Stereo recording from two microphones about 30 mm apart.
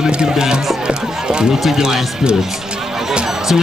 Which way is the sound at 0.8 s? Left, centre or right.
Right.